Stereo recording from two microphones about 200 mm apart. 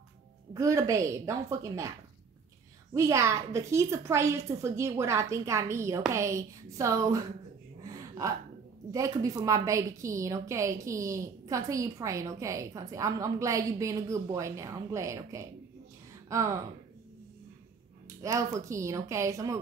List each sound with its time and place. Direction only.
0.5 s a woman's voice: 15° right (ahead or behind)
2.9 s a woman's voice: 15° right (ahead or behind)
7.8 s a sound: 15° right (ahead or behind)
8.9 s a woman's voice: 15° right (ahead or behind)
18.2 s a woman's voice: 15° right (ahead or behind)